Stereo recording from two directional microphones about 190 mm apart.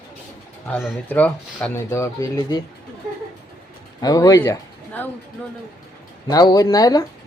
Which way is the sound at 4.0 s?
20° left (ahead or behind).